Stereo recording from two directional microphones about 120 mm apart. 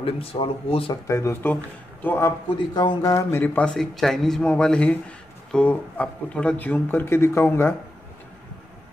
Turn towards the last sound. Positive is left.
turn(degrees=20)  # may be behind; listen again after turning